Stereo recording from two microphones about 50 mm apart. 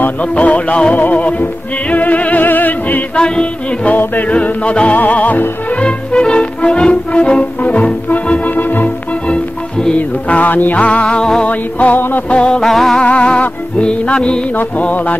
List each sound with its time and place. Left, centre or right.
0.2 s music: left
3.2 s music: centre
3.9 s music: left
4.3 s music: left
5.8 s music: centre
8.5 s organ: left
9.3 s music: centre
9.9 s music: left; by 11.4 s centre
11.4 s music: left
12.3 s music: left
12.6 s music: centre
13.0 s music: left
14.6 s music: left